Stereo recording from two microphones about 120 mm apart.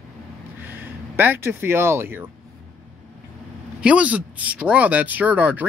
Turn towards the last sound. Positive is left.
turn(degrees=-15)  # may be behind; listen again after turning